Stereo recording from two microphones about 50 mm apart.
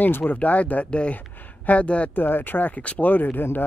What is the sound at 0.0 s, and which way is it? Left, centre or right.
Speech, left.